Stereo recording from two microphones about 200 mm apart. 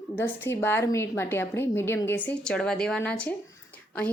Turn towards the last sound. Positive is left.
turn(degrees=5)  # may be behind; listen again after turning